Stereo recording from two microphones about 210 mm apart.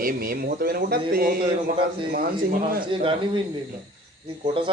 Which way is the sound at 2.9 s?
25° right (ahead or behind).